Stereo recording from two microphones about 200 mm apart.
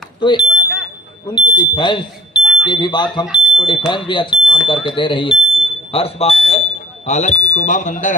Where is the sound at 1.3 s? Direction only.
25° left (ahead or behind).